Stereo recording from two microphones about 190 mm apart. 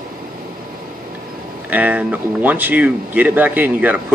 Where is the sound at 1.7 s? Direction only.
10° right (ahead or behind).